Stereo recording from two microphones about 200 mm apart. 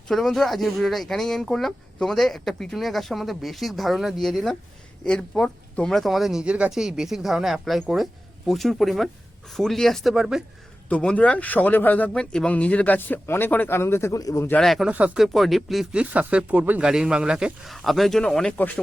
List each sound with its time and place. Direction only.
0.1 s speech: centre (ahead or behind)